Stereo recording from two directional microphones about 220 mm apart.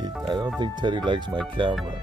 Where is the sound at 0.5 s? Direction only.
20° right (ahead or behind).